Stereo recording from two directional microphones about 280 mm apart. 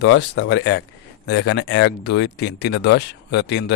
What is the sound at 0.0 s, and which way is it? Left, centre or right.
Speech, left.